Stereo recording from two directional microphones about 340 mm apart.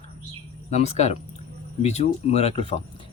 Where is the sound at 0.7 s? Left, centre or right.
Centre.